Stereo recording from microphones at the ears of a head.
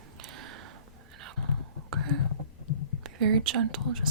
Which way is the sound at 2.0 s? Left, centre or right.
Left.